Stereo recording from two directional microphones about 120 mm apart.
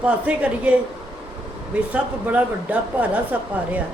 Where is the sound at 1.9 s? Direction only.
10° right (ahead or behind).